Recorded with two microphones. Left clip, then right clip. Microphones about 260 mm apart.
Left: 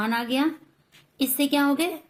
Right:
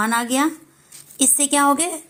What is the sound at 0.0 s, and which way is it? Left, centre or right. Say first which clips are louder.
A woman's voice: right 5 dB; centre.